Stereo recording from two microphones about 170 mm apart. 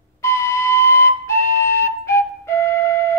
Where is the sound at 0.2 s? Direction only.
15° left (ahead or behind).